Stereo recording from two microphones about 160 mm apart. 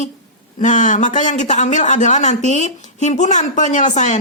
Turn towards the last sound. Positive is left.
turn(degrees=50)  # may be behind; listen again after turning